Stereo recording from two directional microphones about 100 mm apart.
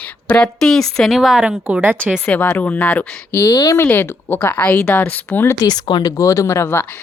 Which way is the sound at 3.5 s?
35° left (ahead or behind).